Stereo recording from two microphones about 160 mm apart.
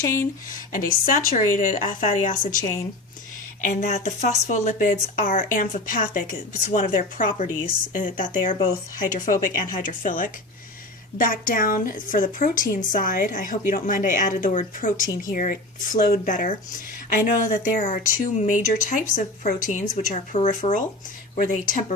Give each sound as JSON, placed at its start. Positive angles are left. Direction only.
{"t": 0.0, "sound": "speech", "side_deg": 15}
{"t": 0.5, "sound": "a woman's voice", "side_deg": 60}